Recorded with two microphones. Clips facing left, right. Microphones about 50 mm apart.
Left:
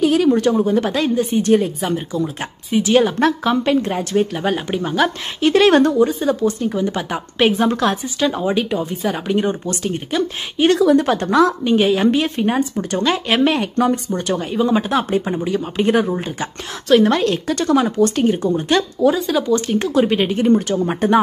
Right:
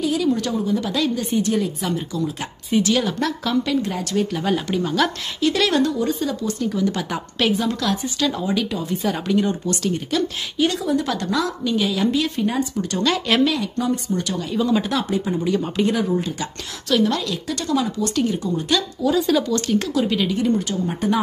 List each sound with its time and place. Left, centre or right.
0.0 s a sound: left
0.4 s a woman's voice: left
5.4 s a woman's voice: left
8.8 s speech: centre
9.3 s a woman's voice: left
12.7 s a woman's voice: left
13.4 s speech: left
14.2 s a woman's voice: left
14.6 s a woman's voice: left
16.9 s a woman's voice: left
19.1 s speech: centre
19.4 s speech: centre
19.9 s a woman's voice: left